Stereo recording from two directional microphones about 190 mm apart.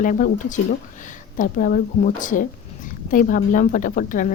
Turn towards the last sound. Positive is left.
turn(degrees=45)  # may be behind; listen again after turning